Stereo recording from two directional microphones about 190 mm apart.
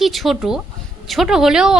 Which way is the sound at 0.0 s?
Centre (ahead or behind).